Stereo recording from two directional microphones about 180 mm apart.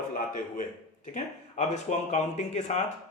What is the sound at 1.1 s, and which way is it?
Speech, 40° left (ahead or behind).